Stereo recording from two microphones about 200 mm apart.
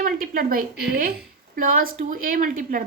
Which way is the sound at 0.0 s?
45° right (ahead or behind).